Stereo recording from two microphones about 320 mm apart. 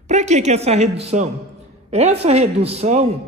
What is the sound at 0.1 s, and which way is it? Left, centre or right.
A woman's voice, right.